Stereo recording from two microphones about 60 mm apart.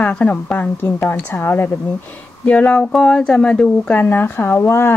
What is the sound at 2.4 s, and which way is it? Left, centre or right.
Speech, left.